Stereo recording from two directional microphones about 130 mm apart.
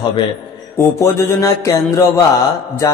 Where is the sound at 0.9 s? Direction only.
20° left (ahead or behind).